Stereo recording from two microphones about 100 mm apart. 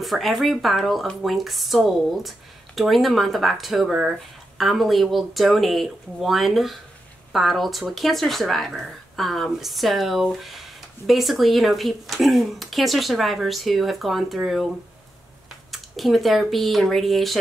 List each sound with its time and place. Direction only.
0.0 s speech: centre (ahead or behind)
15.7 s speech: centre (ahead or behind)